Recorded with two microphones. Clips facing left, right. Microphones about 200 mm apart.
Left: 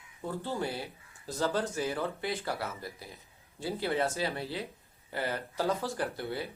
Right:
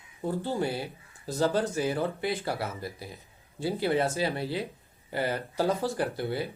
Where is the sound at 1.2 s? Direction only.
30° right (ahead or behind).